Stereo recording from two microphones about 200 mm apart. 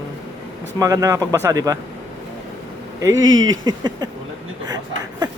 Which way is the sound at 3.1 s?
75° right (ahead or behind).